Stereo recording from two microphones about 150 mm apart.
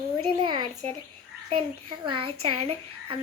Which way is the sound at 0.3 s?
30° right (ahead or behind).